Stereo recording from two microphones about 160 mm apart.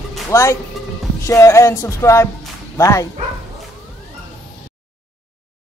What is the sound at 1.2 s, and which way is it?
Music, 20° left (ahead or behind).